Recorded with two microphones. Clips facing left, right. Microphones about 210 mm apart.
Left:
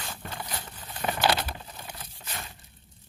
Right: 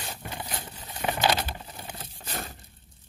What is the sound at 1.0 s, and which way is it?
Patter, 10° right (ahead or behind).